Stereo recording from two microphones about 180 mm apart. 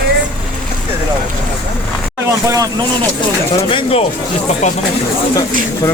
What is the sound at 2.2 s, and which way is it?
Speech, 15° right (ahead or behind).